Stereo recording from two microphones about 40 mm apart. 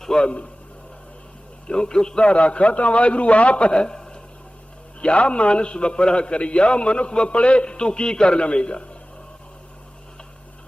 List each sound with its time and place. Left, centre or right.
0.0 s a man's voice: centre
1.6 s a man's voice: left